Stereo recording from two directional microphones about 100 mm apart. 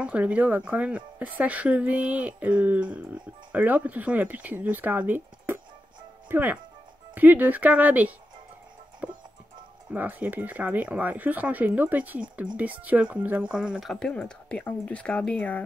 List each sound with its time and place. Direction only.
0.0 s a woman's voice: 15° right (ahead or behind)
9.0 s music: 15° right (ahead or behind)
9.9 s a woman's voice: 15° right (ahead or behind); by 15.6 s 10° left (ahead or behind)